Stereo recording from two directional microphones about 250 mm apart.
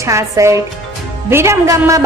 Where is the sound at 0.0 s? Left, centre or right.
Centre.